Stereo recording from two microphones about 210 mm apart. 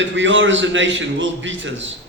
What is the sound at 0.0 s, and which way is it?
A man's voice, 60° right (ahead or behind).